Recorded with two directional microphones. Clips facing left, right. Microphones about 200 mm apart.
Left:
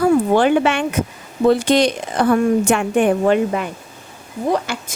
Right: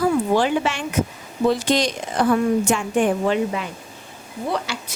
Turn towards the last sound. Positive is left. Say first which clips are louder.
# left 5 dB
turn(degrees=50)  # may be behind; listen again after turning